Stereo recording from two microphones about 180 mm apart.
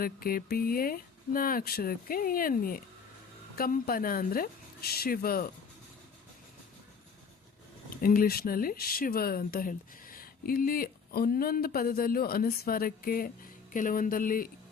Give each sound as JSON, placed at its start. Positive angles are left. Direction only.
{"t": 0.0, "sound": "speech", "side_deg": 55}
{"t": 7.9, "sound": "speech", "side_deg": 55}